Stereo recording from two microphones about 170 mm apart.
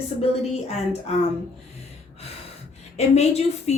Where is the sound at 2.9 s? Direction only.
40° left (ahead or behind).